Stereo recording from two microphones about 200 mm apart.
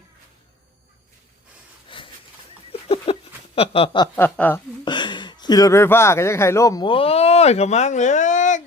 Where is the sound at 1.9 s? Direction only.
25° left (ahead or behind).